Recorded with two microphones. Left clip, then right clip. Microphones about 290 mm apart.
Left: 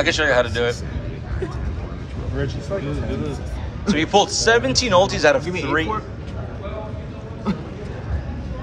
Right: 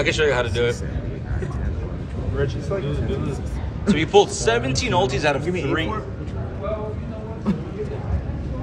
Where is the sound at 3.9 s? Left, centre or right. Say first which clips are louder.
Right 1 dB; centre.